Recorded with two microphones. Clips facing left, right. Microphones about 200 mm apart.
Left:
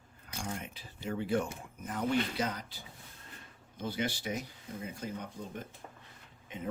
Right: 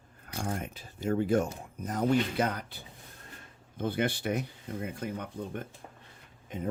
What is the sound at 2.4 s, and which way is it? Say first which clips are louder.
Speech: right 4 dB; 60° right (ahead or behind).